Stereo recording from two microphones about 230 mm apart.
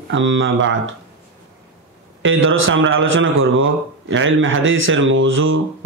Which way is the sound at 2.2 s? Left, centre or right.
Right.